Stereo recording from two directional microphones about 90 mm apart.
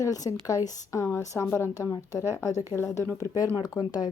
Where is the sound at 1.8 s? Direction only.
40° left (ahead or behind).